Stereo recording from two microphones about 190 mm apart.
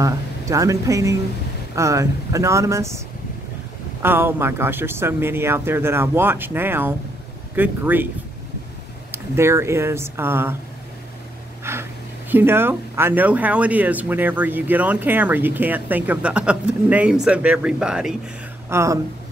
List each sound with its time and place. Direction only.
0.0 s speech: 15° right (ahead or behind)
4.0 s speech: 10° right (ahead or behind)
9.1 s speech: 15° right (ahead or behind)
11.7 s a sound: 15° right (ahead or behind)
12.3 s speech: 10° right (ahead or behind)
18.7 s speech: 15° right (ahead or behind)